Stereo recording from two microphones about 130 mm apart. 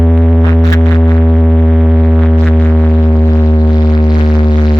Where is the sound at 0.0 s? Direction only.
5° left (ahead or behind).